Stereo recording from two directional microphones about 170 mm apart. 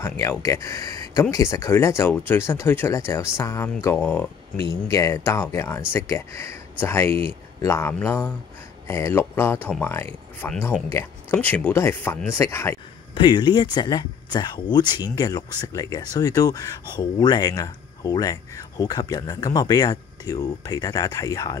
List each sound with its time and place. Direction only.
0.0 s speech: 15° left (ahead or behind)
13.1 s speech: 25° left (ahead or behind)